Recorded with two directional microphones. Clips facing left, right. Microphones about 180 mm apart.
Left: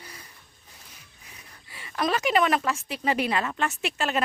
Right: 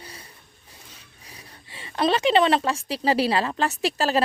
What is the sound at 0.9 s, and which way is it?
A woman's voice, 30° right (ahead or behind).